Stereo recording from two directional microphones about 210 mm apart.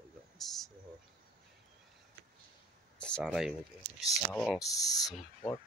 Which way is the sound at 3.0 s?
5° left (ahead or behind).